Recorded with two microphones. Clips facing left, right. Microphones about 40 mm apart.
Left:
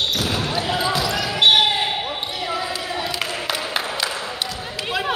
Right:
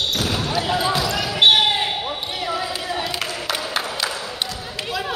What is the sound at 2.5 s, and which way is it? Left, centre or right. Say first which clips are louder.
Basketball bounce: even; centre.